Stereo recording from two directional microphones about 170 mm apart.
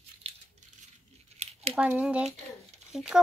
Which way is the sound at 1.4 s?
40° right (ahead or behind).